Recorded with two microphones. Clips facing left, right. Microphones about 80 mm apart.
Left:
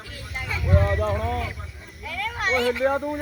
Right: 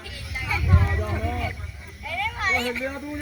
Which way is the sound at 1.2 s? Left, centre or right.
Left.